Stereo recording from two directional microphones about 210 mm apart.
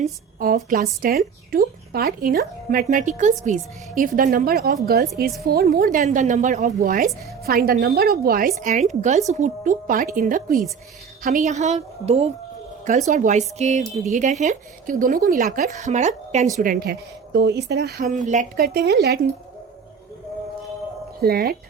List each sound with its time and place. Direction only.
0.0 s a woman's voice: 40° right (ahead or behind)
16.6 s a woman's voice: 45° right (ahead or behind)
18.0 s a woman's voice: 35° right (ahead or behind)
21.2 s a woman's voice: 45° right (ahead or behind)